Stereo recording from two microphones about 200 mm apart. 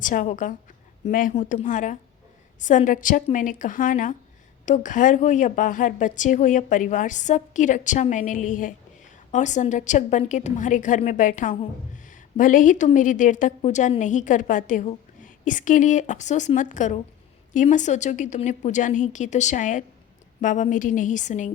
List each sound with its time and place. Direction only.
0.0 s a woman's voice: 40° left (ahead or behind)